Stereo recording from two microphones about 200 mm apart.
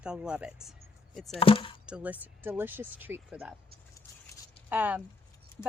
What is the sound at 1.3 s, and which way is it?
Chop, 25° left (ahead or behind).